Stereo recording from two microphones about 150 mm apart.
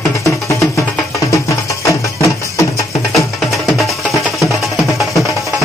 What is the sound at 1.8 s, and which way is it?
Music, 20° left (ahead or behind).